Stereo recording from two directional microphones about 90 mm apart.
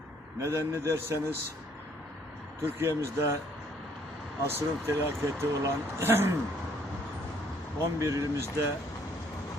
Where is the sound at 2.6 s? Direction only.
25° right (ahead or behind).